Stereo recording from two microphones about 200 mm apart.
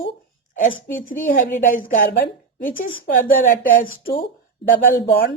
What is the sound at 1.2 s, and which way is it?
Speech, 40° left (ahead or behind).